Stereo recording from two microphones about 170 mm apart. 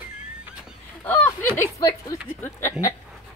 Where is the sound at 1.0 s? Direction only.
10° left (ahead or behind).